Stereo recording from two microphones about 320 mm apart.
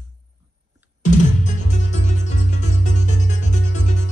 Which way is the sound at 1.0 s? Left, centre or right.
Left.